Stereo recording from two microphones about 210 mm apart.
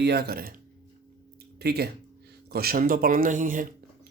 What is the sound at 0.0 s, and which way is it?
Speech, 50° right (ahead or behind).